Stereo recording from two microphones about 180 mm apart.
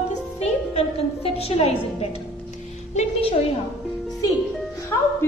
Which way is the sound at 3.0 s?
30° left (ahead or behind).